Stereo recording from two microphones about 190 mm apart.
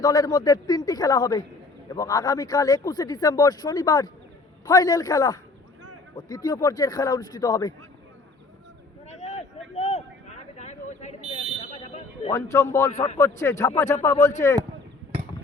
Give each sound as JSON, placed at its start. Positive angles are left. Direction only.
{"t": 0.0, "sound": "speech", "side_deg": 20}
{"t": 9.0, "sound": "a sound", "side_deg": 35}
{"t": 12.3, "sound": "speech", "side_deg": 15}